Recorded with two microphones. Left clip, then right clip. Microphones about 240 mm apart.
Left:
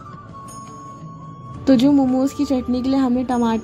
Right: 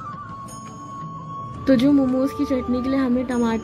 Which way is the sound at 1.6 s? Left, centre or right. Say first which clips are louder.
Left 2 dB; centre.